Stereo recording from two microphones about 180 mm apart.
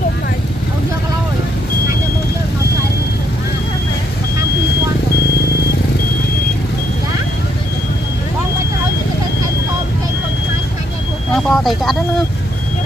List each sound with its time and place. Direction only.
11.3 s speech: centre (ahead or behind)